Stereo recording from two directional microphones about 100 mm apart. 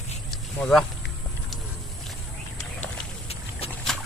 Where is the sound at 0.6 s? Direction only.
5° left (ahead or behind).